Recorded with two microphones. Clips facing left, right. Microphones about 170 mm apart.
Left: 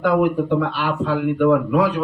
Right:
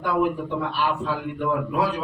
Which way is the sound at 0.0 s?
80° left.